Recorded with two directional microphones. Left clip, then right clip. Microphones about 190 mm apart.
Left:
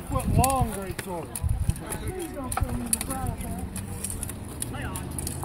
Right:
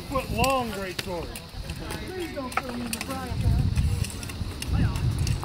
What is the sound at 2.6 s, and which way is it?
Speech, 55° left (ahead or behind).